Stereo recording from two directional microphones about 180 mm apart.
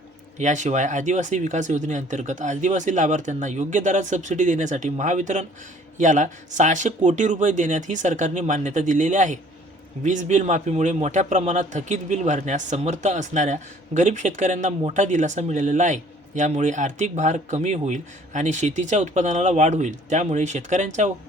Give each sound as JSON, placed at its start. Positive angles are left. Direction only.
{"t": 0.3, "sound": "a man's voice", "side_deg": -40}